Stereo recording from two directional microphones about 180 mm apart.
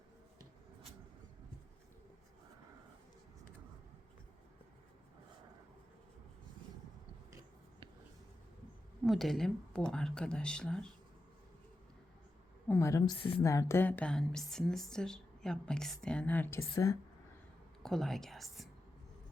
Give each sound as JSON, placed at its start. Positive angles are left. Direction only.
{"t": 9.0, "sound": "a woman's voice", "side_deg": 0}
{"t": 12.6, "sound": "a woman's voice", "side_deg": 15}
{"t": 17.8, "sound": "a woman's voice", "side_deg": 0}